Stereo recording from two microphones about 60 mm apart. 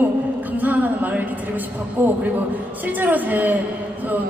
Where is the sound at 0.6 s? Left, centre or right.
Right.